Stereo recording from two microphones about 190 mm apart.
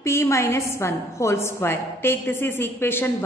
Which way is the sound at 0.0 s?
15° left (ahead or behind).